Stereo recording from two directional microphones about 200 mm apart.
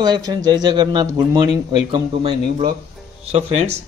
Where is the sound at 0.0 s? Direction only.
20° right (ahead or behind).